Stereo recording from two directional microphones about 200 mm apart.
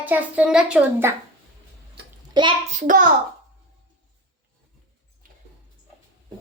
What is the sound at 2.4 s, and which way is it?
Speech, 20° right (ahead or behind).